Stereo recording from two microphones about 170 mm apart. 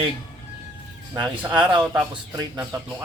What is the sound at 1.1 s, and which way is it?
A man's voice, 15° right (ahead or behind).